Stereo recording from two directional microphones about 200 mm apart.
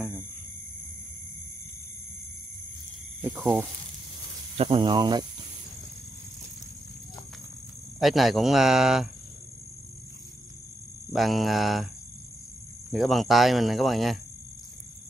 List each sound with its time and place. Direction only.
3.2 s speech: 5° right (ahead or behind)
4.6 s speech: 25° right (ahead or behind)
8.0 s speech: centre (ahead or behind)
11.1 s speech: centre (ahead or behind)
12.9 s speech: centre (ahead or behind)